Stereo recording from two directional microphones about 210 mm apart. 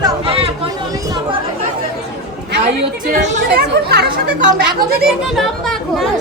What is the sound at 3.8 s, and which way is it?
Speech, 50° right (ahead or behind).